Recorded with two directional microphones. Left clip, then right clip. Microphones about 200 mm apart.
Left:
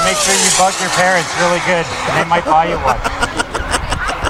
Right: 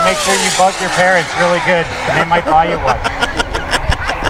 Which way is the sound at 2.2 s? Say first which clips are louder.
Right 1 dB; 15° right (ahead or behind).